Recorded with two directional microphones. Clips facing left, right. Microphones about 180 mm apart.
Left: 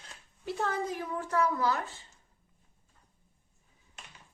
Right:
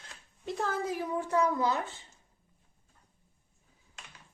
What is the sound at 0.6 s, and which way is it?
Speech, centre (ahead or behind).